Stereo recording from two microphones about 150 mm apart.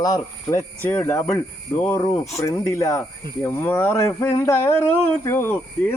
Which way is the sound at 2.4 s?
20° left (ahead or behind).